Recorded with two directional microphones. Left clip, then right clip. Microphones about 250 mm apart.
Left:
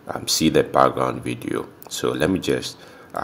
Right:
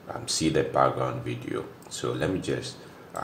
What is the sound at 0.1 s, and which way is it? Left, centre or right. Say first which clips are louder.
Speech: left 7 dB; left.